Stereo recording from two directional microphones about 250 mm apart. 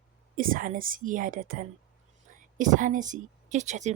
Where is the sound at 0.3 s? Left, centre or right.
Right.